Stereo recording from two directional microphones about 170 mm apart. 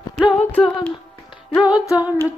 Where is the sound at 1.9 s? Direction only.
10° right (ahead or behind).